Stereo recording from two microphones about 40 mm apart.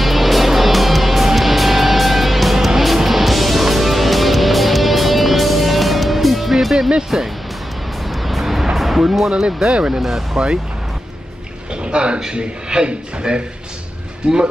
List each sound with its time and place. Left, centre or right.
0.0 s music: centre
7.1 s speech: centre
8.1 s vehicle: centre
8.7 s music: centre
9.7 s a man's voice: right
10.0 s speech: centre
11.7 s a sound: right
12.2 s a man's voice: centre